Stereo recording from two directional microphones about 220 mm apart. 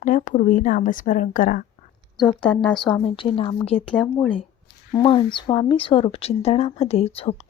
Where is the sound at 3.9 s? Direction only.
5° left (ahead or behind).